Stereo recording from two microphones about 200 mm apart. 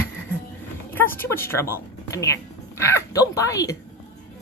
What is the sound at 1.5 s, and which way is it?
Speech, 10° left (ahead or behind).